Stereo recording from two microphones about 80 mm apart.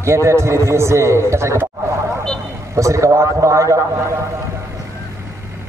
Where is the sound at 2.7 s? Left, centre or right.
Right.